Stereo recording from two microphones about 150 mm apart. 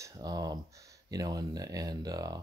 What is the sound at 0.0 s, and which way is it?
Speech, 25° right (ahead or behind).